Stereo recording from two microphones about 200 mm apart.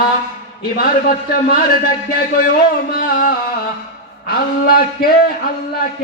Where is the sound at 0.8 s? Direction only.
50° left (ahead or behind).